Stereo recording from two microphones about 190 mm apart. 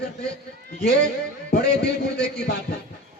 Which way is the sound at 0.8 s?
60° left (ahead or behind).